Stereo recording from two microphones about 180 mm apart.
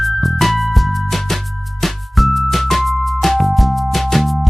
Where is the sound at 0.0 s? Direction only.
Centre (ahead or behind).